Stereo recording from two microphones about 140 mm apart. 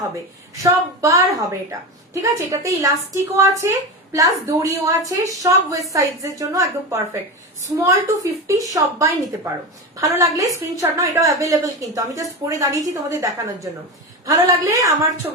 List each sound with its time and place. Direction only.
0.6 s a woman's voice: 20° right (ahead or behind)